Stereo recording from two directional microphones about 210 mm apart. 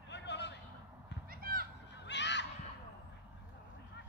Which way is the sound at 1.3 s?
45° right (ahead or behind).